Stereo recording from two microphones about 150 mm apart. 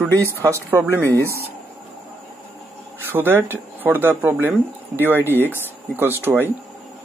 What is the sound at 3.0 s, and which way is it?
Speech, 15° right (ahead or behind).